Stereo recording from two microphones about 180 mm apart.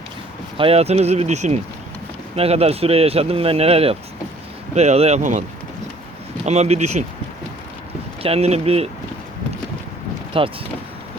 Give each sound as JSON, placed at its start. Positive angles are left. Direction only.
{"t": 0.5, "sound": "speech", "side_deg": -30}
{"t": 6.4, "sound": "speech", "side_deg": -40}
{"t": 8.2, "sound": "speech", "side_deg": -35}
{"t": 10.3, "sound": "speech", "side_deg": -30}